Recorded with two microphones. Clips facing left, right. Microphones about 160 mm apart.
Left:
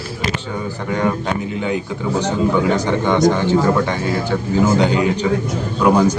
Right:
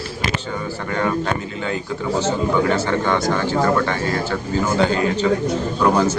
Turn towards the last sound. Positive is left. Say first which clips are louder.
# left 2 dB
turn(degrees=10)  # may be behind; listen again after turning